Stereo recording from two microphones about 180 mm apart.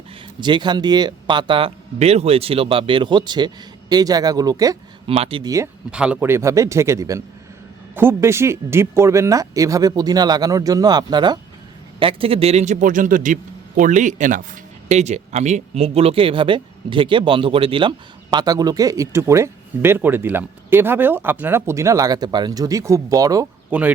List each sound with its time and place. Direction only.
0.3 s a man's voice: 25° right (ahead or behind)
5.0 s speech: 30° right (ahead or behind)
5.9 s a man's voice: 5° right (ahead or behind)